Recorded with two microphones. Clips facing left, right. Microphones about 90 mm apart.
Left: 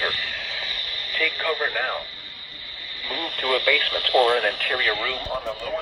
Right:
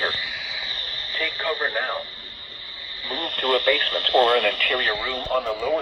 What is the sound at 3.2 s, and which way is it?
Speech, 50° right (ahead or behind).